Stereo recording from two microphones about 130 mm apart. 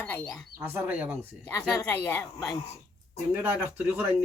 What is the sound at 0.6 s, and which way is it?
Speech, 15° right (ahead or behind).